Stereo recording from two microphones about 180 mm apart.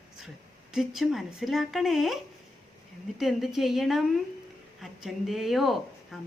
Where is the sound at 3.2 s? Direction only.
Centre (ahead or behind).